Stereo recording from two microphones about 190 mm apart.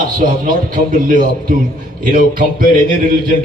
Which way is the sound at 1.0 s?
45° right (ahead or behind).